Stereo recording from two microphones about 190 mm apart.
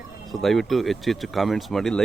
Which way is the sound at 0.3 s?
Centre (ahead or behind).